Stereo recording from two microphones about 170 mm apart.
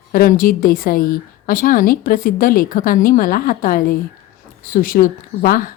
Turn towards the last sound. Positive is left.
turn(degrees=55)  # may be behind; listen again after turning